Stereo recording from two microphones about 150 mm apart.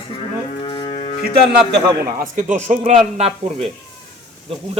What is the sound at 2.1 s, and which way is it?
Speech, 65° right (ahead or behind).